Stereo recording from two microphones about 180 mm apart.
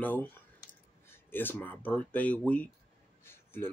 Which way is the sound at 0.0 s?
10° left (ahead or behind).